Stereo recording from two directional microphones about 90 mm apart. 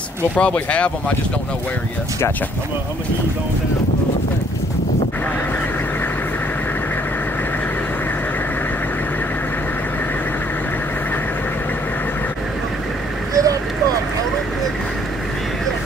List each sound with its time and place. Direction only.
0.4 s speech: 15° left (ahead or behind)
13.3 s vehicle: 40° right (ahead or behind)